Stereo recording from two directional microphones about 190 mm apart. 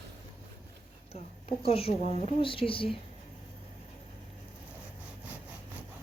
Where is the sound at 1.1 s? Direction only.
30° left (ahead or behind).